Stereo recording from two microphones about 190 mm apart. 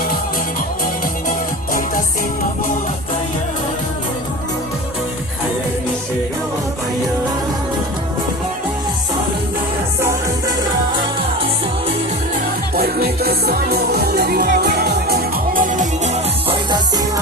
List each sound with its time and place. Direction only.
12.7 s music: 55° right (ahead or behind)